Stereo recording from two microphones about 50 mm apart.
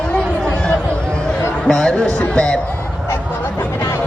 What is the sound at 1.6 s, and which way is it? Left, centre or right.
Speech, centre.